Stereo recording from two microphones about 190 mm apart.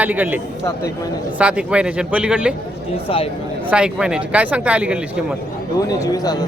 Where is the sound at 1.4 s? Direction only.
5° right (ahead or behind).